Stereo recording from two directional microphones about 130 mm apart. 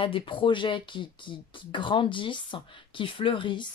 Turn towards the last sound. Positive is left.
turn(degrees=40)  # may be behind; listen again after turning